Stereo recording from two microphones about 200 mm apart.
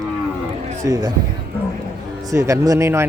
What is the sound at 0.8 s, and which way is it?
Speech, 20° right (ahead or behind).